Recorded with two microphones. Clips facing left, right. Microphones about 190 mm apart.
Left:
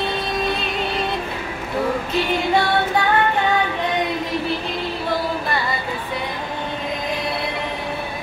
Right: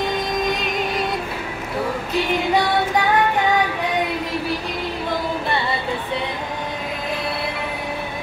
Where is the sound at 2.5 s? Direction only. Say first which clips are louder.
Even; 10° right (ahead or behind).